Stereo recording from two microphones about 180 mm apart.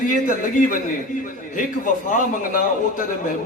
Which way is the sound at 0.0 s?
45° left (ahead or behind).